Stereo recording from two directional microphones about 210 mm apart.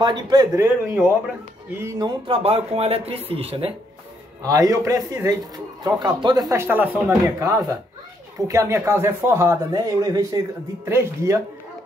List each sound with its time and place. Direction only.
0.0 s speech: 20° right (ahead or behind)
4.4 s speech: 15° right (ahead or behind)